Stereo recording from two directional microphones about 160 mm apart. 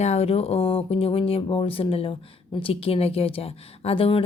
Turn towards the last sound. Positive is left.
turn(degrees=35)  # may be behind; listen again after turning